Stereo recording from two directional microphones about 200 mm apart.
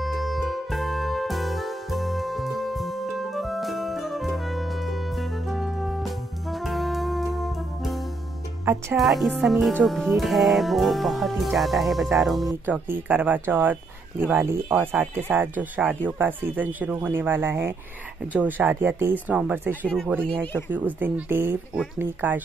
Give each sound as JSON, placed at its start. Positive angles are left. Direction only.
{"t": 0.0, "sound": "music", "side_deg": 0}
{"t": 8.9, "sound": "speech", "side_deg": 0}
{"t": 20.2, "sound": "speech", "side_deg": 5}
{"t": 20.7, "sound": "speech", "side_deg": -10}